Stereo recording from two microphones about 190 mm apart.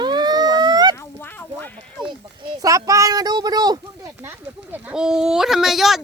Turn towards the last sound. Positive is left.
turn(degrees=0)  # may be behind; listen again after turning